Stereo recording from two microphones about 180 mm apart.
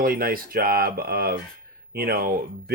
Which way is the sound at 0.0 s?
55° right (ahead or behind).